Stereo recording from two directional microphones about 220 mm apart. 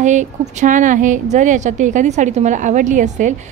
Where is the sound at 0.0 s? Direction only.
35° right (ahead or behind).